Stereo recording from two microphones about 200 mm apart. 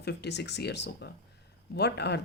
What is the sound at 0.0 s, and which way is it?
Speech, 55° left (ahead or behind).